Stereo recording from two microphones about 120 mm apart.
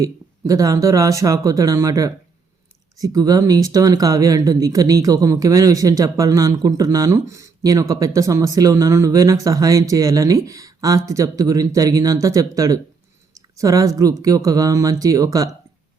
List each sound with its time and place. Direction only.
0.0 s speech: 30° right (ahead or behind)